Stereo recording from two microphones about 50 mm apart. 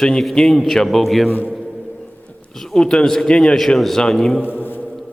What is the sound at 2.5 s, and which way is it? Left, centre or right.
A man's voice, centre.